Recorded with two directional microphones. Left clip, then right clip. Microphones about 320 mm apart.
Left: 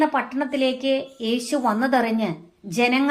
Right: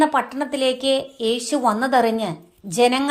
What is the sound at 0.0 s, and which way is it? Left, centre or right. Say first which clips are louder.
A woman's voice: right 3 dB; right.